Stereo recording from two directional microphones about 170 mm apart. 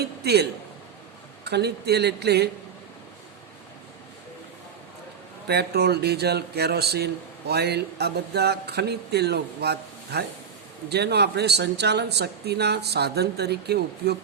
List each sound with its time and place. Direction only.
0.0 s a man's voice: 70° right (ahead or behind)
1.5 s speech: 75° right (ahead or behind)
5.5 s speech: 70° right (ahead or behind)